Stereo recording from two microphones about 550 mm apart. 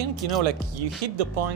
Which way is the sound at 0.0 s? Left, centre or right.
Right.